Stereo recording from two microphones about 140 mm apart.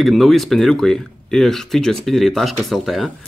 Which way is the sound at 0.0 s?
Centre (ahead or behind).